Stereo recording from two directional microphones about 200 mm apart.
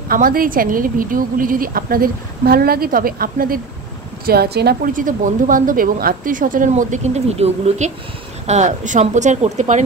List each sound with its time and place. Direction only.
0.1 s a woman's voice: 45° right (ahead or behind)